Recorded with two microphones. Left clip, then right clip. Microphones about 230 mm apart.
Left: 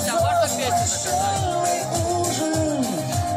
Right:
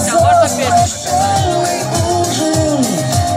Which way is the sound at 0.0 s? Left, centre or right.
Left.